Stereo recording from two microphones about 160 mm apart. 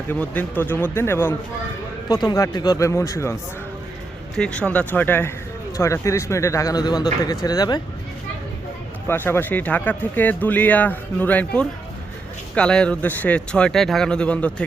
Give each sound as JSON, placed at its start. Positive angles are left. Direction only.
{"t": 0.1, "sound": "speech", "side_deg": 10}
{"t": 4.4, "sound": "speech", "side_deg": 5}
{"t": 9.0, "sound": "speech", "side_deg": 15}